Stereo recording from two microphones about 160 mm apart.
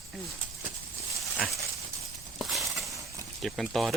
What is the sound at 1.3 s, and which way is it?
Dog, centre (ahead or behind).